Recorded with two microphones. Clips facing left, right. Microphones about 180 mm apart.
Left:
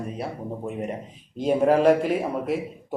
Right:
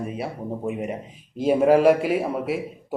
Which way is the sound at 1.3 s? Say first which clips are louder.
Right 2 dB; 5° right (ahead or behind).